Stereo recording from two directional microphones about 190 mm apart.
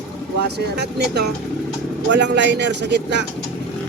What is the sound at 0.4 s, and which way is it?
Speech, 60° right (ahead or behind).